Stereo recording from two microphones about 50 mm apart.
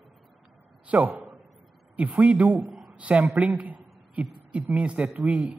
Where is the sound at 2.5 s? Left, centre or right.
Centre.